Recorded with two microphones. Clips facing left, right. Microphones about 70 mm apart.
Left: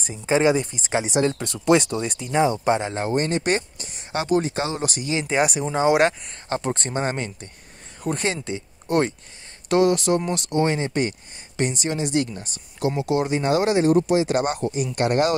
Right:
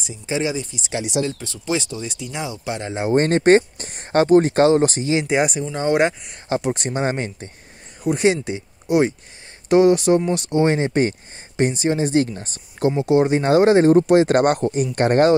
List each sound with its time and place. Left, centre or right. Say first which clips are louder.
0.0 s speech: left 4 dB; left
2.1 s speech: left 8 dB; left
2.9 s speech: right 4 dB; centre
3.2 s speech: right 10 dB; right
6.5 s speech: right 3 dB; centre
8.0 s speech: right 7 dB; centre
9.7 s speech: right 5 dB; right
13.0 s speech: right 6 dB; right
14.0 s speech: right 6 dB; right